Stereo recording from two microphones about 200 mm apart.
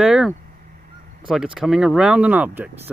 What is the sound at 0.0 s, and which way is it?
Speech, centre (ahead or behind).